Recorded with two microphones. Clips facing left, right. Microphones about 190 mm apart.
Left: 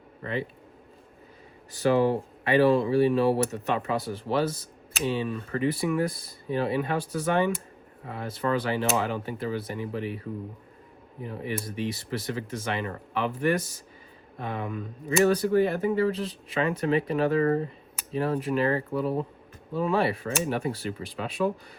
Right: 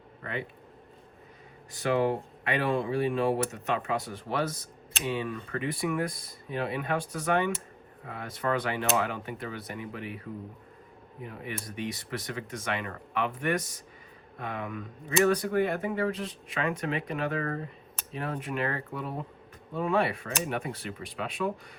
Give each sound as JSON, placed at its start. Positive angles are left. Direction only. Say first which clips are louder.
{"t": 0.2, "sound": "speech", "louder": "left 5 dB", "side_deg": 30}
{"t": 1.7, "sound": "speech", "louder": "left 4 dB", "side_deg": 35}